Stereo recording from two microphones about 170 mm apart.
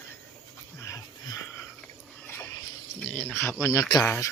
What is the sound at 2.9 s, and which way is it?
Speech, 10° left (ahead or behind).